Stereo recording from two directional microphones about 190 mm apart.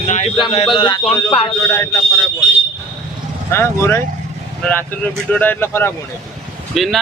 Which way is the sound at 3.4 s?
15° left (ahead or behind).